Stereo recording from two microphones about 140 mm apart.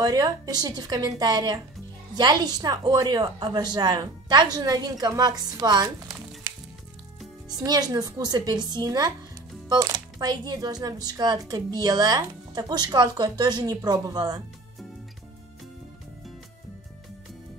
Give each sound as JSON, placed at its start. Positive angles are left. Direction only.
{"t": 0.0, "sound": "speech", "side_deg": -25}
{"t": 6.5, "sound": "music", "side_deg": -20}
{"t": 7.4, "sound": "speech", "side_deg": -30}